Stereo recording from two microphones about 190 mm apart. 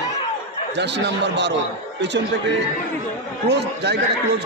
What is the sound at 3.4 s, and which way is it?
Speech, 65° right (ahead or behind).